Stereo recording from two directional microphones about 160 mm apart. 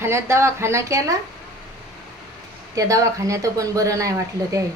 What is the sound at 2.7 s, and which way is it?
Speech, 20° right (ahead or behind).